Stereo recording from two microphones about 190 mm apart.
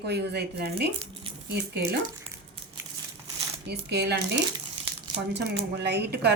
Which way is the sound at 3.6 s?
60° right (ahead or behind).